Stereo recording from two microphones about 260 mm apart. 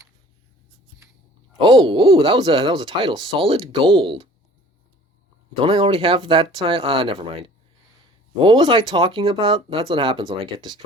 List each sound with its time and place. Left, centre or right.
1.5 s speech: centre
5.5 s speech: right